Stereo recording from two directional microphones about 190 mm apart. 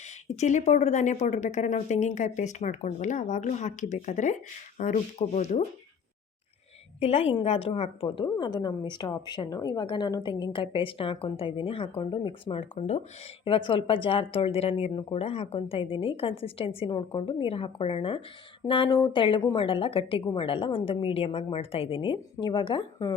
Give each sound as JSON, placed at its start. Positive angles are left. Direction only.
{"t": 0.3, "sound": "a woman's voice", "side_deg": 35}
{"t": 7.0, "sound": "a woman's voice", "side_deg": 30}